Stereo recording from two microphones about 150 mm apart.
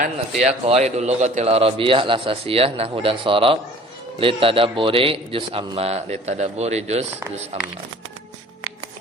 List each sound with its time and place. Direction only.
0.4 s a man's voice: 45° right (ahead or behind)